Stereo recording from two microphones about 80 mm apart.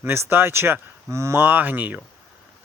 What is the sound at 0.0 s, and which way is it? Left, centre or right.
A man's voice, right.